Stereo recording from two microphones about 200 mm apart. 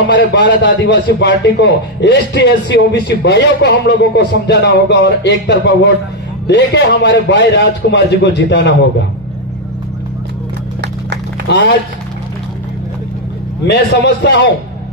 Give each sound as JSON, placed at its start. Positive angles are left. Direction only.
{"t": 0.1, "sound": "a man's voice", "side_deg": 60}
{"t": 11.5, "sound": "a man's voice", "side_deg": 55}
{"t": 13.7, "sound": "a man's voice", "side_deg": 60}